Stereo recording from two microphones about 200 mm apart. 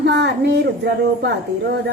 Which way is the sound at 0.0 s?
55° right (ahead or behind).